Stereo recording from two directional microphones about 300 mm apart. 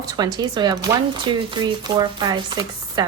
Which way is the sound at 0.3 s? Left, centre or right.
Centre.